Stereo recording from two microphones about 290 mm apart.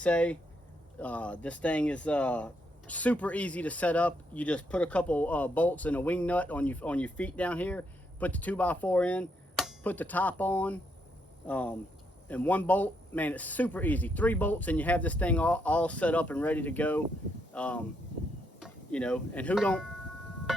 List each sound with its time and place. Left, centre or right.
0.0 s speech: centre